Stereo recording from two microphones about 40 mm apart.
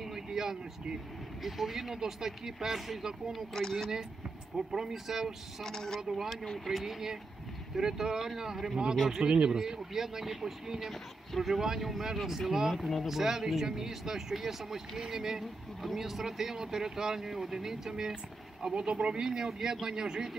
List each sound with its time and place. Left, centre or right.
0.0 s vehicle: centre
1.4 s speech: centre
3.3 s speech: centre
4.7 s speech: centre
5.6 s speech: centre
9.1 s speech: right
9.6 s speech: centre